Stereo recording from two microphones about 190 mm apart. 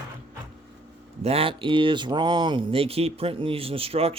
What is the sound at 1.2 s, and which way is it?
Speech, 30° right (ahead or behind).